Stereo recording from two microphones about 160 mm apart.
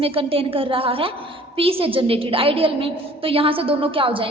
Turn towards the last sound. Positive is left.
turn(degrees=-35)  # may be behind; listen again after turning